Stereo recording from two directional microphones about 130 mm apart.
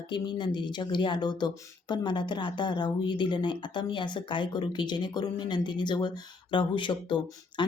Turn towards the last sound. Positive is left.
turn(degrees=35)  # may be behind; listen again after turning